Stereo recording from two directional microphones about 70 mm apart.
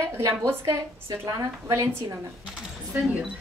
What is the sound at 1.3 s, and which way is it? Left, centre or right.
Speech, right.